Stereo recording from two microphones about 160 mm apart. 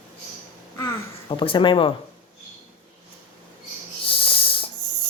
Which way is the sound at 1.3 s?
30° left (ahead or behind).